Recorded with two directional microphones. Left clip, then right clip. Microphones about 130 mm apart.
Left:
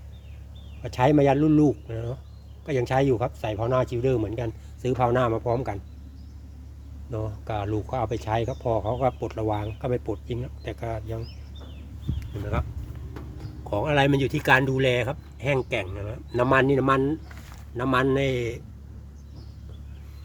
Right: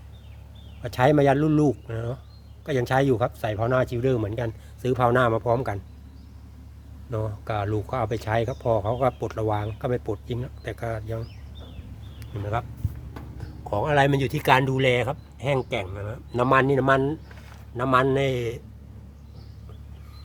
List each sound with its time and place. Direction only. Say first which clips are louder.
0.8 s speech: right 1 dB; 30° right (ahead or behind)
7.1 s speech: right 2 dB; 40° right (ahead or behind); by 12.6 s 20° right (ahead or behind)
13.7 s speech: right 1 dB; 10° right (ahead or behind)